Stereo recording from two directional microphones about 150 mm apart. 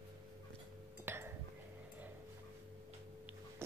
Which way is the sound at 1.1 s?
15° right (ahead or behind).